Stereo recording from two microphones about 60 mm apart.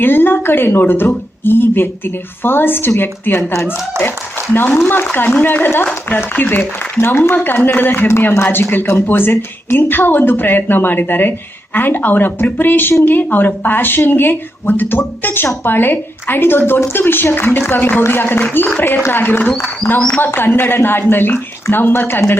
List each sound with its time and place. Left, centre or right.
0.0 s speech: left
4.5 s speech: left